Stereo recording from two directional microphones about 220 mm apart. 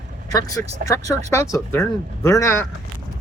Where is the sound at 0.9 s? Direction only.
15° left (ahead or behind).